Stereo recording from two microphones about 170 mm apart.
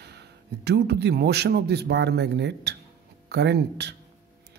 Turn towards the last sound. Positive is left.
turn(degrees=-80)